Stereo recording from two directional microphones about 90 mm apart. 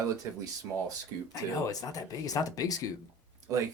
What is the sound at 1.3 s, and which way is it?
Speech, 40° left (ahead or behind).